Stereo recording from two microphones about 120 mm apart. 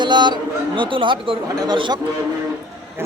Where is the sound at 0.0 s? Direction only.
40° right (ahead or behind).